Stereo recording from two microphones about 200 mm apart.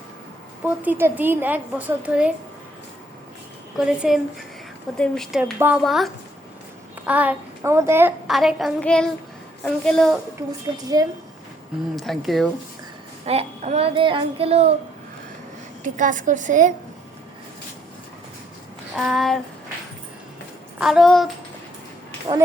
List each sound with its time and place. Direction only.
0.6 s a woman's voice: 10° right (ahead or behind)
3.8 s child singing: 5° right (ahead or behind)
5.5 s a woman's voice: 10° right (ahead or behind)
5.8 s child singing: centre (ahead or behind)
7.0 s a child's voice: 5° right (ahead or behind)
8.3 s child singing: centre (ahead or behind)
11.0 s a woman's voice: 20° right (ahead or behind)
11.9 s child singing: centre (ahead or behind)
13.2 s child singing: 35° right (ahead or behind)
15.8 s child singing: 40° right (ahead or behind)
18.9 s child singing: centre (ahead or behind)
20.7 s child singing: 5° right (ahead or behind)